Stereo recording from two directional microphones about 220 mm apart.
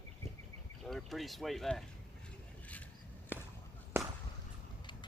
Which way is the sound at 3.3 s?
10° right (ahead or behind).